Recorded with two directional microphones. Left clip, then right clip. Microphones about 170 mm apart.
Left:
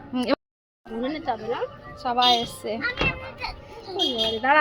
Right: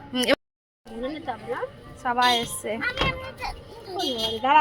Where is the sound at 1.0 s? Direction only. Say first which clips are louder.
Left 3 dB; 5° right (ahead or behind).